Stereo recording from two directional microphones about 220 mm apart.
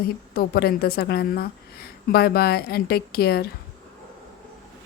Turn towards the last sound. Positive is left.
turn(degrees=45)  # may be behind; listen again after turning